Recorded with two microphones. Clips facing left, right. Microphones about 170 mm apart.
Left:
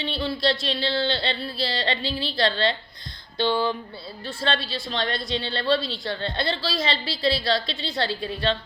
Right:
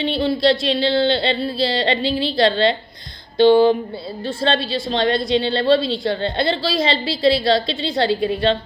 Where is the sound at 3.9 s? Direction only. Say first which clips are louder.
Right 9 dB; 25° right (ahead or behind).